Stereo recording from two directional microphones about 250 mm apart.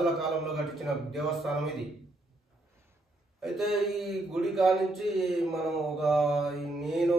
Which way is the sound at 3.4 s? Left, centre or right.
Centre.